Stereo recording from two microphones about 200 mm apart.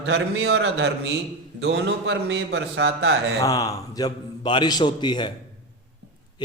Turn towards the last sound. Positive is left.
turn(degrees=20)  # may be behind; listen again after turning